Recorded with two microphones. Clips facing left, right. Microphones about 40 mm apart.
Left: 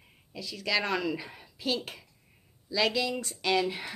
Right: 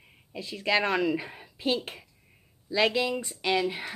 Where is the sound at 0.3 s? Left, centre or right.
Right.